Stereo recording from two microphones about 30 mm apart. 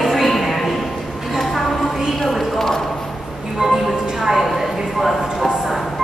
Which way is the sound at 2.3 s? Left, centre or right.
Centre.